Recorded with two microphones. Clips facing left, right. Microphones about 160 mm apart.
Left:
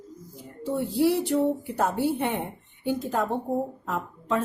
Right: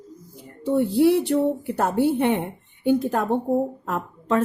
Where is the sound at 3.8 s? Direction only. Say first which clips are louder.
Right 4 dB; 60° right (ahead or behind).